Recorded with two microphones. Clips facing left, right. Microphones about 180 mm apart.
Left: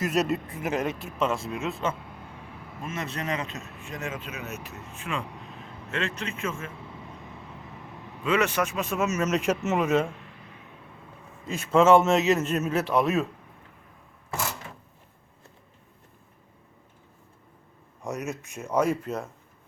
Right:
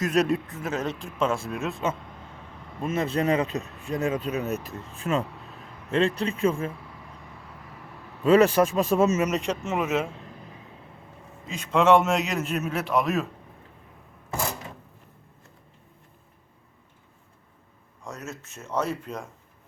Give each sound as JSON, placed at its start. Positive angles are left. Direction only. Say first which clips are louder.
{"t": 0.0, "sound": "speech", "louder": "right 2 dB", "side_deg": 5}
{"t": 2.0, "sound": "vehicle", "louder": "left 1 dB", "side_deg": 10}
{"t": 2.8, "sound": "speech", "louder": "right 8 dB", "side_deg": -30}
{"t": 6.7, "sound": "vehicle", "louder": "left 3 dB", "side_deg": 25}
{"t": 8.2, "sound": "speech", "louder": "right 7 dB", "side_deg": -35}
{"t": 9.5, "sound": "speech", "louder": "left 2 dB", "side_deg": 0}
{"t": 11.4, "sound": "speech", "louder": "left 1 dB", "side_deg": 5}
{"t": 18.0, "sound": "speech", "louder": "left 5 dB", "side_deg": 20}